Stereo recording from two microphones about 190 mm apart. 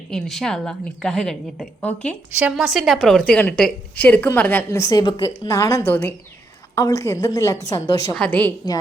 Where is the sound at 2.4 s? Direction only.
5° right (ahead or behind).